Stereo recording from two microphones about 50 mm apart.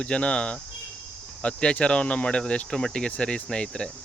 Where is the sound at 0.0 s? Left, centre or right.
Left.